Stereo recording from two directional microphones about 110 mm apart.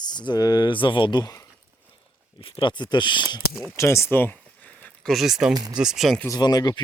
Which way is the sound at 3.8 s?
25° left (ahead or behind).